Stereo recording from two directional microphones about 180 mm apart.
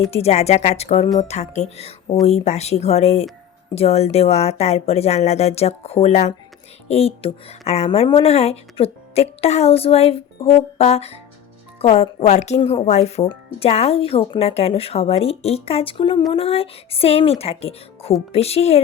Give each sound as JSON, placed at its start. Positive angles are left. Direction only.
{"t": 0.1, "sound": "speech", "side_deg": 35}